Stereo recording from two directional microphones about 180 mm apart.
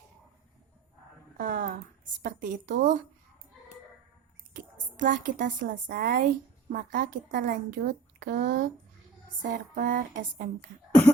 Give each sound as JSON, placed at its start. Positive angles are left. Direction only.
{"t": 1.4, "sound": "a woman's voice", "side_deg": -50}
{"t": 4.5, "sound": "a woman's voice", "side_deg": -50}